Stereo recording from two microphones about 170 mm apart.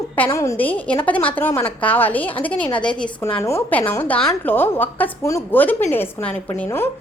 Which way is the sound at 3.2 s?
15° left (ahead or behind).